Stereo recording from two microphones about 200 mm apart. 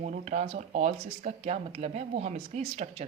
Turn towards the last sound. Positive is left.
turn(degrees=-30)  # may be behind; listen again after turning